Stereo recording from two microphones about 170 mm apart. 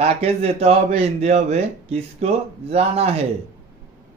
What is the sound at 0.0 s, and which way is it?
A man's voice, 35° right (ahead or behind).